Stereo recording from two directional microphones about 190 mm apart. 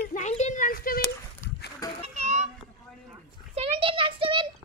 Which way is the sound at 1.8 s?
20° left (ahead or behind).